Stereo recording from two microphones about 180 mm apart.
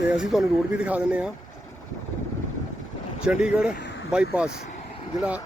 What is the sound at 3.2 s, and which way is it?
Speech, 5° right (ahead or behind).